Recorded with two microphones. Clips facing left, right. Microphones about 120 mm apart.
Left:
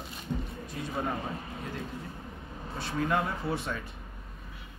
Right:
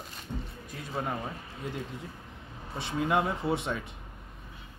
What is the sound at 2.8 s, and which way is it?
Speech, 15° right (ahead or behind).